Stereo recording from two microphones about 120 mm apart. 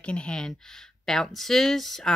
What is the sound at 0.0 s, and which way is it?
Speech, 10° left (ahead or behind).